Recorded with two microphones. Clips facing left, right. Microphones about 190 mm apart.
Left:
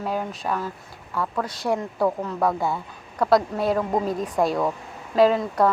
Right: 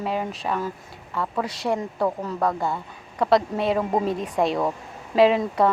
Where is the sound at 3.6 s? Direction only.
5° right (ahead or behind).